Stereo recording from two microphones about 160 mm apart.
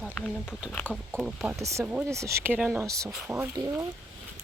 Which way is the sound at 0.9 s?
Centre (ahead or behind).